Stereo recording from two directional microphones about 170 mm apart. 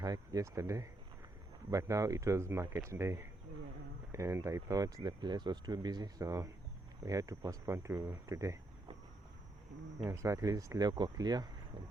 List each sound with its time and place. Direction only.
0.0 s speech: 20° right (ahead or behind)
10.1 s speech: 15° right (ahead or behind)